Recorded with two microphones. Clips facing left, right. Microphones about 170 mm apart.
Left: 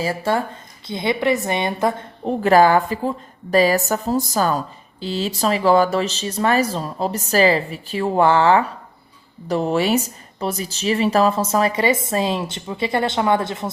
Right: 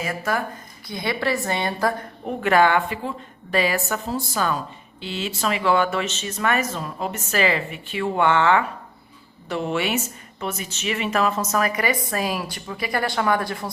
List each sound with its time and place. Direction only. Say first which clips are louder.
0.0 s a woman's voice: left 4 dB; 30° left (ahead or behind)